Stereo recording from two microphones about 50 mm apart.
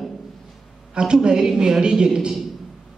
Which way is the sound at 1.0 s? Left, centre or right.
Centre.